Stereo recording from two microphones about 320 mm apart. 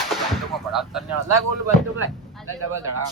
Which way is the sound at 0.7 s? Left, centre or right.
Centre.